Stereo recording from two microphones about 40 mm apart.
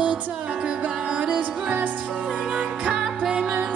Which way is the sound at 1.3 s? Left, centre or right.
Right.